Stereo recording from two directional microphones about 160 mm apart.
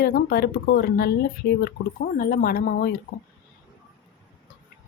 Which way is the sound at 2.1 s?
65° left (ahead or behind).